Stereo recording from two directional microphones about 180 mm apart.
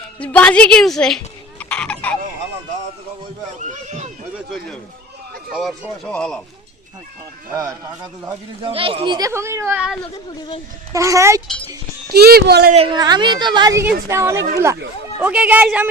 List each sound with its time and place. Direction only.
0.2 s speech: 5° left (ahead or behind)
3.6 s run: 40° right (ahead or behind)
5.5 s speech: centre (ahead or behind)
7.5 s a woman's voice: 20° right (ahead or behind)
8.6 s speech: 30° right (ahead or behind); by 10.0 s 5° right (ahead or behind)
10.9 s speech: 15° right (ahead or behind)
12.1 s speech: 60° right (ahead or behind)
12.7 s a woman's voice: 30° right (ahead or behind); by 15.9 s 10° right (ahead or behind)